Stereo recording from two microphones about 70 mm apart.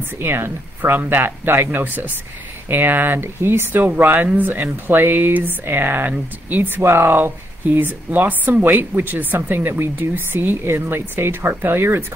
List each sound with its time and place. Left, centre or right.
0.2 s speech: right